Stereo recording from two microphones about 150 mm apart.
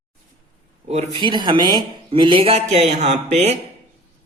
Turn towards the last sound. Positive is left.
turn(degrees=-45)  # may be behind; listen again after turning